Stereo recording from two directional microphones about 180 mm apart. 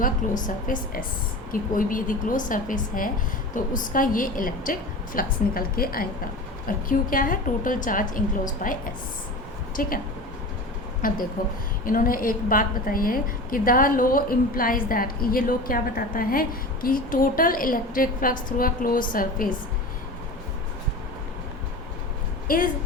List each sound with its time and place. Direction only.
0.0 s a woman's voice: 45° left (ahead or behind)
11.0 s a woman's voice: 50° left (ahead or behind)
22.5 s a woman's voice: 50° left (ahead or behind)